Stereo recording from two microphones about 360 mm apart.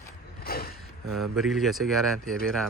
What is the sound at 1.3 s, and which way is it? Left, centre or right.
Speech, centre.